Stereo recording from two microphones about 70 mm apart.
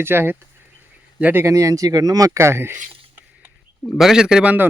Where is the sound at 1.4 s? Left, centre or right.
Right.